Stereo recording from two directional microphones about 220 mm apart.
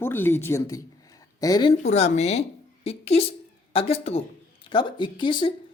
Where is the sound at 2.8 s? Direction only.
25° left (ahead or behind).